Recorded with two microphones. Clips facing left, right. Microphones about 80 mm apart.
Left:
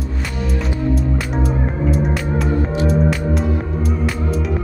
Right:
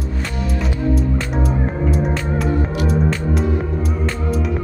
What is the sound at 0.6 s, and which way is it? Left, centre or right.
Music, centre.